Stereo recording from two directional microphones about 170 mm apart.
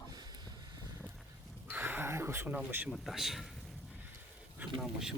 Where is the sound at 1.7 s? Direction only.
10° right (ahead or behind).